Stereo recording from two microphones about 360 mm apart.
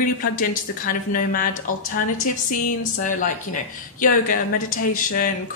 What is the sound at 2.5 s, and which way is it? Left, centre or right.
A woman's voice, left.